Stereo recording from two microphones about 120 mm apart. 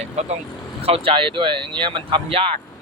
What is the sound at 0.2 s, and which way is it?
Speech, 70° right (ahead or behind).